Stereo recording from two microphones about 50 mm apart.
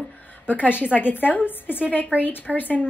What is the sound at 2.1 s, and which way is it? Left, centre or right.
Speech, right.